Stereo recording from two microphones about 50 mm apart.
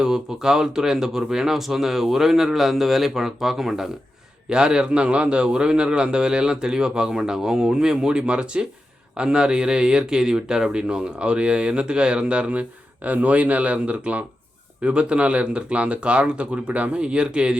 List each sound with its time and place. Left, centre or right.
0.0 s a man's voice: centre